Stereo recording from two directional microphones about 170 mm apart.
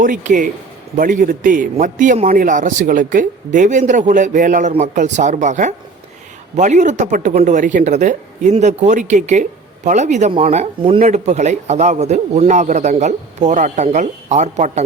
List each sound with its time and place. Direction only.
0.0 s speech: 50° right (ahead or behind)